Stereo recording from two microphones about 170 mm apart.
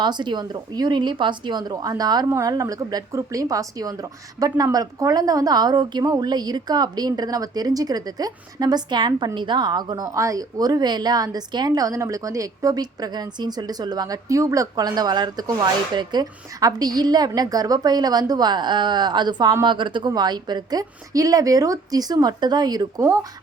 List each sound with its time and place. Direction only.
0.0 s speech: 25° right (ahead or behind)